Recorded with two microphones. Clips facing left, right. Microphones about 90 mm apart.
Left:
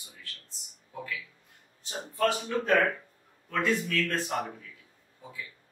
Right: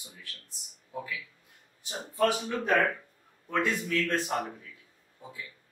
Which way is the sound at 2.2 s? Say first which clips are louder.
Even; 20° right (ahead or behind).